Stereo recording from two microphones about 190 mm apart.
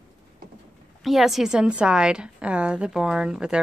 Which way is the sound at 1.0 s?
Centre (ahead or behind).